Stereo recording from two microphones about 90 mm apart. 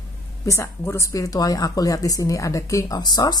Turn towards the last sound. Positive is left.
turn(degrees=50)  # may be behind; listen again after turning